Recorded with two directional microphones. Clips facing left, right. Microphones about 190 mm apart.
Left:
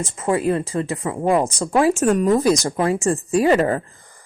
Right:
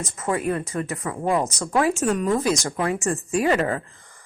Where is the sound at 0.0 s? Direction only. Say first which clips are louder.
Left 5 dB; 30° left (ahead or behind).